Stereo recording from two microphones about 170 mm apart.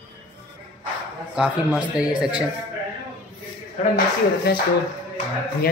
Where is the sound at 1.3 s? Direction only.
5° right (ahead or behind).